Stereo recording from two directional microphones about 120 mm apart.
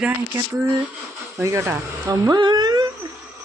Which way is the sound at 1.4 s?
25° right (ahead or behind).